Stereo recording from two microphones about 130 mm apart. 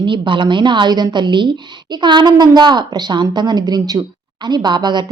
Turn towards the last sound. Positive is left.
turn(degrees=-35)  # may be behind; listen again after turning